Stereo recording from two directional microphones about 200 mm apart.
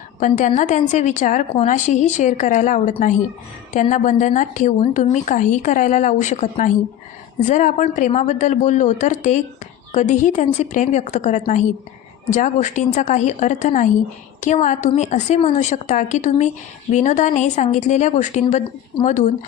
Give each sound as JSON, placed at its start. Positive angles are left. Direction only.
{"t": 0.2, "sound": "a woman's voice", "side_deg": 40}